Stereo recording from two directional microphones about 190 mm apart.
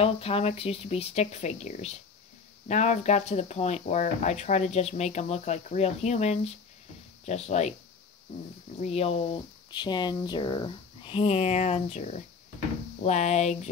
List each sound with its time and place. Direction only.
0.0 s speech: 30° left (ahead or behind)
8.8 s speech: 30° left (ahead or behind)